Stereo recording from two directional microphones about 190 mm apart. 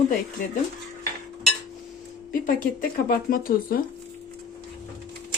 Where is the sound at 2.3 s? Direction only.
50° left (ahead or behind).